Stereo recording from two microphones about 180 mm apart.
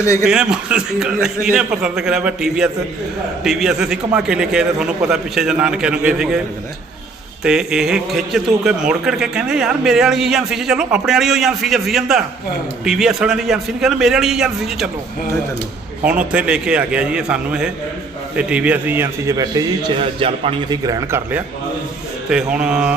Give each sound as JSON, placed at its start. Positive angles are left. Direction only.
{"t": 0.0, "sound": "a man's voice", "side_deg": 15}
{"t": 0.3, "sound": "a man's voice", "side_deg": -5}
{"t": 7.4, "sound": "a man's voice", "side_deg": -5}
{"t": 16.3, "sound": "a man's voice", "side_deg": -5}
{"t": 22.3, "sound": "a man's voice", "side_deg": -5}